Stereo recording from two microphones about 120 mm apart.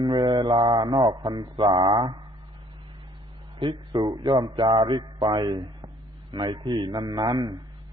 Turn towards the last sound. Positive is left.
turn(degrees=-35)  # may be behind; listen again after turning